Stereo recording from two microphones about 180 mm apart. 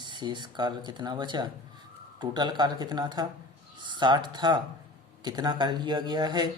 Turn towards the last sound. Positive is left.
turn(degrees=-25)  # may be behind; listen again after turning